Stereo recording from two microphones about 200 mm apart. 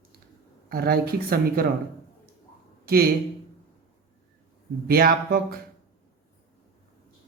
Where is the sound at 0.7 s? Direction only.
50° right (ahead or behind).